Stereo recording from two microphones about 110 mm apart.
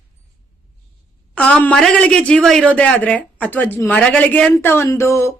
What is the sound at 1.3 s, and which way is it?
A woman's voice, 10° left (ahead or behind).